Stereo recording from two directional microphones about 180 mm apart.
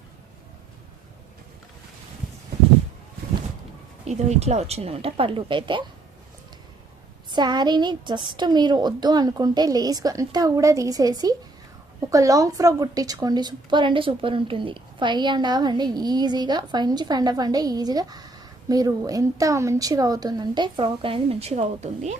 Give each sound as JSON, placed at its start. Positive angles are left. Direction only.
{"t": 4.0, "sound": "a woman's voice", "side_deg": -40}
{"t": 7.3, "sound": "a woman's voice", "side_deg": -25}